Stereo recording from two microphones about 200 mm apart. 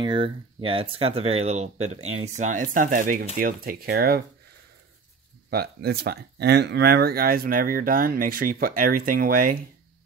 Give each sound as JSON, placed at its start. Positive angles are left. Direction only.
{"t": 0.0, "sound": "speech", "side_deg": -25}
{"t": 5.5, "sound": "speech", "side_deg": -50}